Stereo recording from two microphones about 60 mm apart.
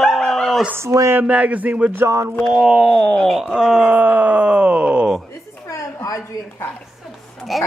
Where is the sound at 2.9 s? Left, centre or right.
Centre.